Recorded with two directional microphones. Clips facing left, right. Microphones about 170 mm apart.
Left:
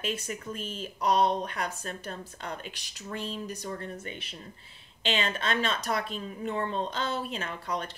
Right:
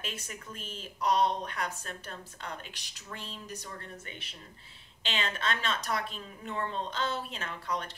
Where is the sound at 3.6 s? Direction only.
30° left (ahead or behind).